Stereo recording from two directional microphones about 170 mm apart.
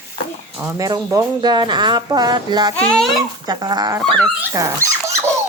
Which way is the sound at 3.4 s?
25° right (ahead or behind).